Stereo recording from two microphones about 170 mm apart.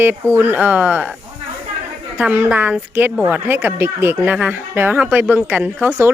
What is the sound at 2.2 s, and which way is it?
Speech, 10° right (ahead or behind).